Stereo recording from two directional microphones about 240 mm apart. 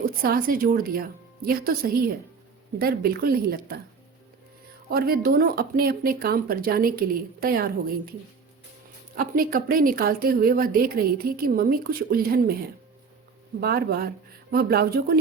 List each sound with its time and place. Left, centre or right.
0.0 s speech: right
4.9 s speech: right
9.1 s speech: right
13.6 s speech: right